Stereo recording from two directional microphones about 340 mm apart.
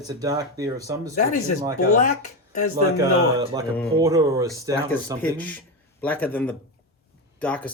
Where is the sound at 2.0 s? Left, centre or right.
Left.